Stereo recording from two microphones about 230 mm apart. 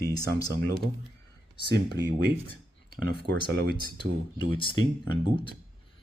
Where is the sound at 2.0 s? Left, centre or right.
Right.